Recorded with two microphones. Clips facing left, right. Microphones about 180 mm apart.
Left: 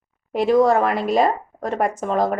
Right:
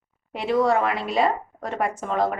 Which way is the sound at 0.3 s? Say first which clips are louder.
Left 5 dB; 45° left (ahead or behind).